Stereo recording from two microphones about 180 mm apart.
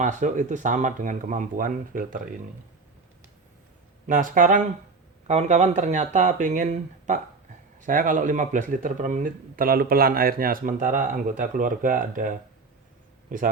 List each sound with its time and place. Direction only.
0.0 s speech: 45° right (ahead or behind)
4.0 s speech: 50° right (ahead or behind)